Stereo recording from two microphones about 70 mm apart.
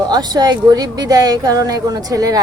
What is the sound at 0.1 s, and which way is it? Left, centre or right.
A woman's voice, right.